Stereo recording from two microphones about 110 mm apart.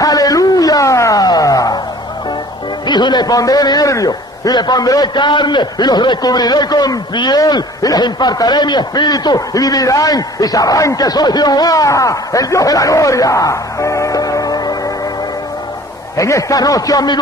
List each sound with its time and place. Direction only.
0.0 s a sound: 35° left (ahead or behind)
2.9 s a man's voice: 40° left (ahead or behind)
16.2 s a man's voice: 30° left (ahead or behind)